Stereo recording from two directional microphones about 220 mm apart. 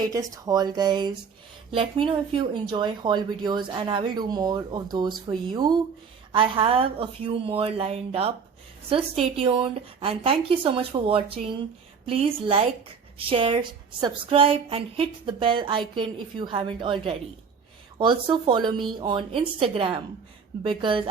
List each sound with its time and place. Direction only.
0.0 s a woman's voice: 15° right (ahead or behind)